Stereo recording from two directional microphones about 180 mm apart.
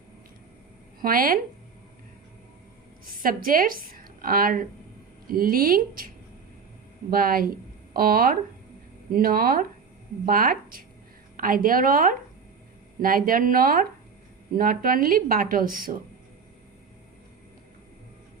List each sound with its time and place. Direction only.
1.0 s a woman's voice: 50° right (ahead or behind)
3.2 s a woman's voice: 50° right (ahead or behind)
7.1 s a woman's voice: 55° right (ahead or behind)